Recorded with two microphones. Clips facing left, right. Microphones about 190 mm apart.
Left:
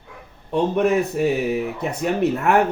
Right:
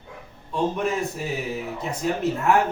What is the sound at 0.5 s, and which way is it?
Speech, 65° left (ahead or behind).